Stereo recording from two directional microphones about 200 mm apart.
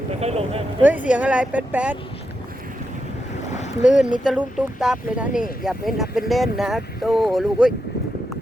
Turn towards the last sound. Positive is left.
turn(degrees=0)  # may be behind; listen again after turning